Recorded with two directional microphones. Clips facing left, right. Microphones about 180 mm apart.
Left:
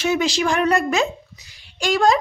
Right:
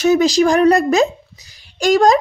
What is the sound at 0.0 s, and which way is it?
Speech, 40° right (ahead or behind).